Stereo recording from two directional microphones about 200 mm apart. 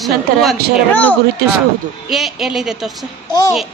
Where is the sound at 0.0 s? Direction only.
Centre (ahead or behind).